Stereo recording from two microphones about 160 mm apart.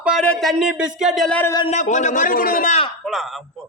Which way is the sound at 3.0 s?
Centre (ahead or behind).